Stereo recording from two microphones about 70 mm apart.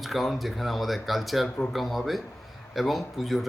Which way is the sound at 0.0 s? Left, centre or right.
Centre.